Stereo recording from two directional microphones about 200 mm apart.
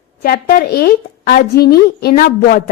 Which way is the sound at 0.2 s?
45° left (ahead or behind).